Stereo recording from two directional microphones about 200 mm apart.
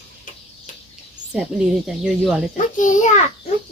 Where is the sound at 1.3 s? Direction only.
5° right (ahead or behind).